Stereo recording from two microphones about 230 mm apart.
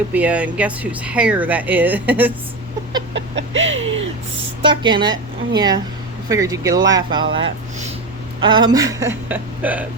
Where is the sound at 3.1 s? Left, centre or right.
Right.